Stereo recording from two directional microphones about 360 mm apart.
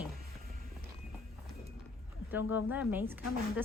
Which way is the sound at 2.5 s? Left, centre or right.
Centre.